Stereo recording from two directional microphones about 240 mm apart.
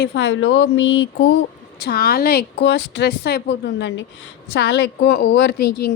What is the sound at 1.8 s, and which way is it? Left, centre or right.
A woman's voice, left.